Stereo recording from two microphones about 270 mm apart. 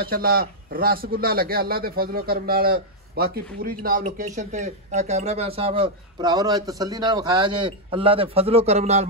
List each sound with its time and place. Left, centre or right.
0.0 s a man's voice: right